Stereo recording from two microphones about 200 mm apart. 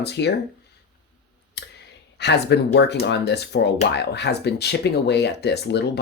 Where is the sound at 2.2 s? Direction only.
55° left (ahead or behind).